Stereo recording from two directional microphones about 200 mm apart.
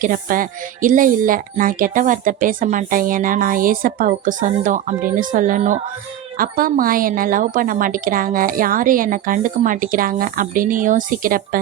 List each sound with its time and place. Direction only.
0.0 s a woman's voice: 45° right (ahead or behind)